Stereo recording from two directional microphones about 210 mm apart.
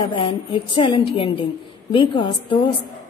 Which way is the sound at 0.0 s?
25° left (ahead or behind).